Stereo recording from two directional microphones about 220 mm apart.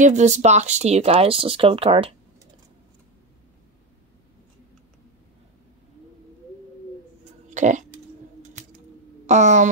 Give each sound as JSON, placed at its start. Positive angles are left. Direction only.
{"t": 0.0, "sound": "speech", "side_deg": -35}
{"t": 7.4, "sound": "burping", "side_deg": -35}
{"t": 9.2, "sound": "a sound", "side_deg": -30}